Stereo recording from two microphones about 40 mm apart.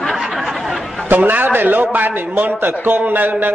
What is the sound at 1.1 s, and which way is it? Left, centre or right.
A man's voice, right.